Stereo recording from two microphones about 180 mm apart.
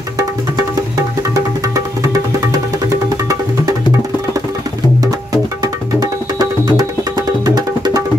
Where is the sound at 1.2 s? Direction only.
20° right (ahead or behind).